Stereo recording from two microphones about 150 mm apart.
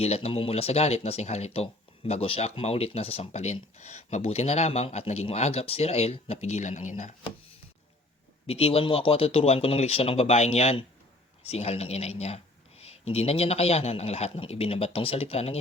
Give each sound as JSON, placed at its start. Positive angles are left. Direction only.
{"t": 0.0, "sound": "speech", "side_deg": 40}
{"t": 8.4, "sound": "speech", "side_deg": 40}